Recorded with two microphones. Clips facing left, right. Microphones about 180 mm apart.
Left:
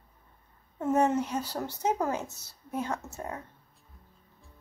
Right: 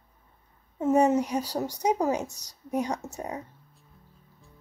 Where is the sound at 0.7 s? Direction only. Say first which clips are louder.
Right 4 dB; 10° right (ahead or behind).